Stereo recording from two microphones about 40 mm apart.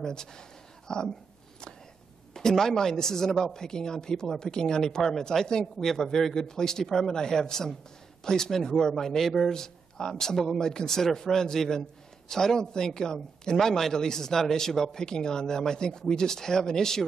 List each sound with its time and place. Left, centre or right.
0.0 s speech: centre
2.3 s a man's voice: centre
9.5 s a man's voice: centre